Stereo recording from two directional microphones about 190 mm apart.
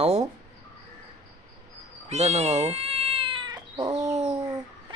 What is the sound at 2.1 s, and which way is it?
Cat, 35° right (ahead or behind).